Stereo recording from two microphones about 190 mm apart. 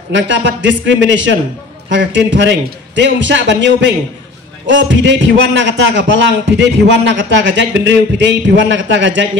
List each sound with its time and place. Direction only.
0.1 s a man's voice: 70° right (ahead or behind)